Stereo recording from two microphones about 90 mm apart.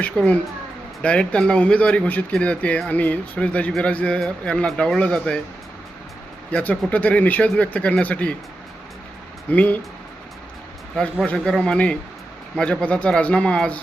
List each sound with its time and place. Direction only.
0.0 s a man's voice: 15° left (ahead or behind)
6.5 s a man's voice: 15° left (ahead or behind)
9.5 s a man's voice: 15° left (ahead or behind)
10.9 s a man's voice: 10° left (ahead or behind)